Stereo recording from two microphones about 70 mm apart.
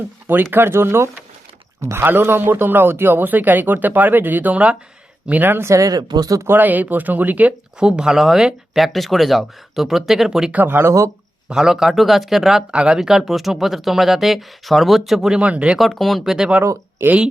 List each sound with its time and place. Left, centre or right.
0.5 s a man's voice: right; by 4.8 s centre
5.3 s speech: right
5.7 s speech: right
6.4 s a man's voice: right
7.8 s speech: centre
10.5 s a man's voice: right
10.8 s speech: right
11.4 s speech: centre
15.4 s speech: centre
15.8 s speech: centre
17.0 s speech: right